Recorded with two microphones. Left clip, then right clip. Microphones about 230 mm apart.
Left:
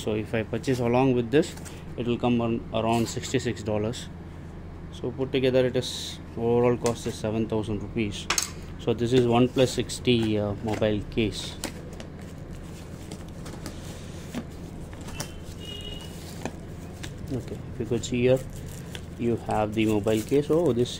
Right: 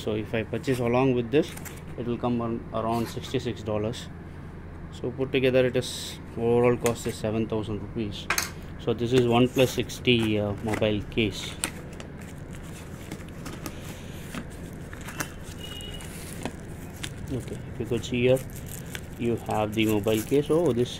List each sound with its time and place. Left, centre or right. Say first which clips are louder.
0.0 s speech: left 1 dB; centre
5.0 s speech: right 1 dB; centre
7.4 s speech: left 1 dB; centre
17.8 s speech: even; centre